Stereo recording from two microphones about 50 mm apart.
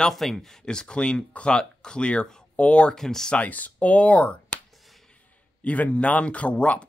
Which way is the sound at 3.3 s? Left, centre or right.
Left.